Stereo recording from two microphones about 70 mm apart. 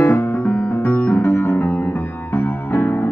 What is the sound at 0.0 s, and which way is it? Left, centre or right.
Music, left.